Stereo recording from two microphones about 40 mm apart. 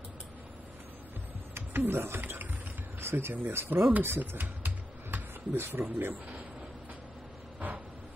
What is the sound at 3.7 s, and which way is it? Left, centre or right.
Speech, right.